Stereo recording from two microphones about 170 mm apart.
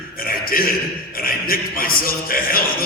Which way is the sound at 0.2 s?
60° left (ahead or behind).